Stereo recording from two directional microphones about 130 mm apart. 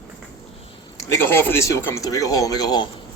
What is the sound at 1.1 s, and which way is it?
Speech, 20° left (ahead or behind).